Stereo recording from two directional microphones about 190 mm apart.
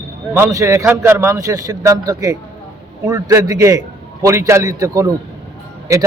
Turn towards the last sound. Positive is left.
turn(degrees=-15)  # may be behind; listen again after turning